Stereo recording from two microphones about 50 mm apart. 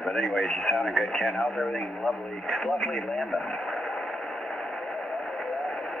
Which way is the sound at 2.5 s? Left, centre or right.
Centre.